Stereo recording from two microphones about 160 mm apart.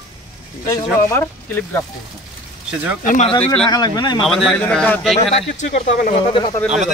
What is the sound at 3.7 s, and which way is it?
Speech, 25° left (ahead or behind).